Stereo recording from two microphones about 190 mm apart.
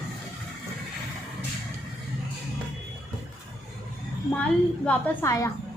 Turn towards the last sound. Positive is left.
turn(degrees=15)  # may be behind; listen again after turning